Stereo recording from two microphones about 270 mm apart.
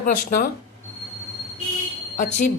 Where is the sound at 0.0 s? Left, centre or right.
Left.